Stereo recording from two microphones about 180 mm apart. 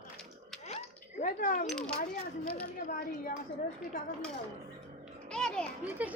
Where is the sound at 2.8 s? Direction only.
50° left (ahead or behind).